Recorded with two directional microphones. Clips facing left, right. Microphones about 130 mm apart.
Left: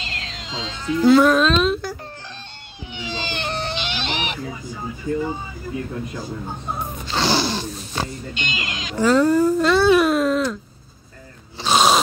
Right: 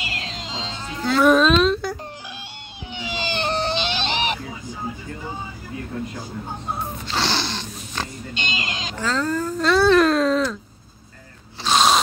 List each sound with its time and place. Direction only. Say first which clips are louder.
0.0 s music: right 2 dB; 10° right (ahead or behind)
0.3 s music: even; 30° right (ahead or behind)
1.2 s a sound: right 1 dB; centre (ahead or behind)
3.1 s baby cry: right 1 dB; 15° right (ahead or behind)
3.3 s baby cry: right 5 dB; 30° right (ahead or behind)
7.1 s roaring cats: left 5 dB; 5° left (ahead or behind)
8.4 s speech: right 2 dB; 30° right (ahead or behind)
9.0 s a sound: left 8 dB; 10° left (ahead or behind)
11.6 s gasp: left 1 dB; 5° left (ahead or behind)